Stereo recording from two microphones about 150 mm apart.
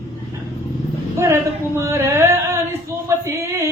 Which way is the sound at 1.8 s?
15° right (ahead or behind).